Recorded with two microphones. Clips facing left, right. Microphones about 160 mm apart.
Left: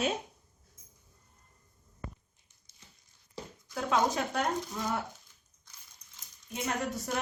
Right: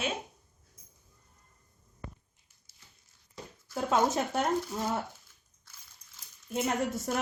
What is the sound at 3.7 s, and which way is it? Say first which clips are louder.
Speech: right 2 dB; 25° right (ahead or behind).